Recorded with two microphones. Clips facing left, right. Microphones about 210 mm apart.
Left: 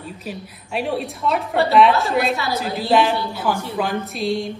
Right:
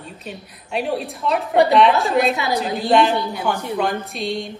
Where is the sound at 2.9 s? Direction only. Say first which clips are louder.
Right 1 dB; 5° left (ahead or behind).